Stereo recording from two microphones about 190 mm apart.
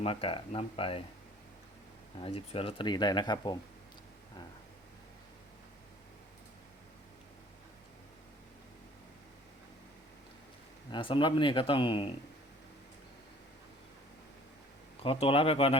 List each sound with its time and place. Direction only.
0.0 s speech: 30° left (ahead or behind)
2.1 s speech: 30° left (ahead or behind)
10.9 s speech: 25° left (ahead or behind)
15.0 s speech: 30° left (ahead or behind)